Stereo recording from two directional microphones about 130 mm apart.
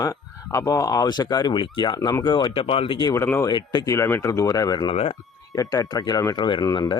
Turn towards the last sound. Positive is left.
turn(degrees=30)  # may be behind; listen again after turning